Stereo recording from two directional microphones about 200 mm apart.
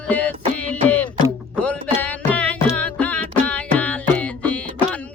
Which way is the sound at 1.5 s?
5° left (ahead or behind).